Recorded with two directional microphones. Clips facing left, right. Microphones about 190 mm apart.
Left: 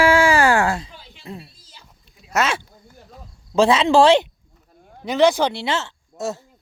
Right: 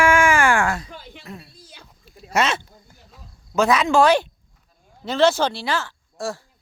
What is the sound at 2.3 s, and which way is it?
Speech, 10° left (ahead or behind).